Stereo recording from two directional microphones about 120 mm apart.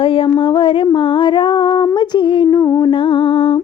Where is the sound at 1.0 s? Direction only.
45° left (ahead or behind).